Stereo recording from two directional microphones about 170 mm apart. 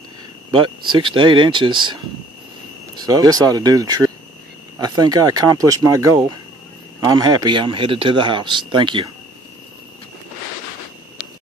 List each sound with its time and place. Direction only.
0.5 s speech: 25° right (ahead or behind)
3.0 s speech: 20° right (ahead or behind)